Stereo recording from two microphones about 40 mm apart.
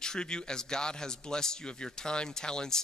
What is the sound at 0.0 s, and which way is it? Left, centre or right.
Speech, centre.